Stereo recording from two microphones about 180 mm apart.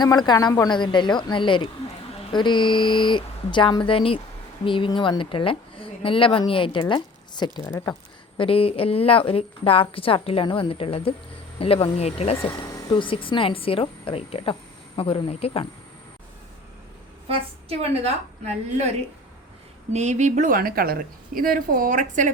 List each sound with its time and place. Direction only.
0.0 s speech: 25° left (ahead or behind)
8.4 s a woman's voice: 30° left (ahead or behind)
17.2 s a woman's voice: 35° right (ahead or behind)
19.9 s speech: 40° right (ahead or behind)